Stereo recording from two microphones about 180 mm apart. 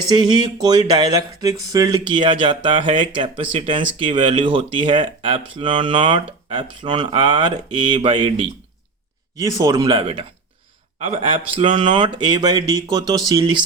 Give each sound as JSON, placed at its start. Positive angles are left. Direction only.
{"t": 0.1, "sound": "speech", "side_deg": -25}